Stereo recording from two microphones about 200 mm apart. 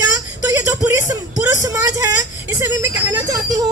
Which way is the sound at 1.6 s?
15° right (ahead or behind).